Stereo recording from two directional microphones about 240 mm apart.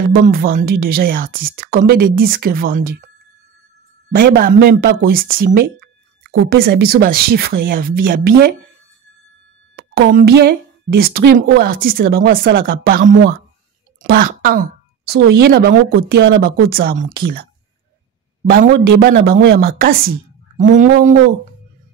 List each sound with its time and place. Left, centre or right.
0.2 s a woman's voice: right
4.1 s a woman's voice: right
9.9 s a woman's voice: right
18.5 s a woman's voice: right